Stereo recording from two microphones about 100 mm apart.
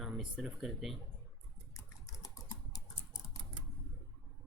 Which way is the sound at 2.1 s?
35° left (ahead or behind).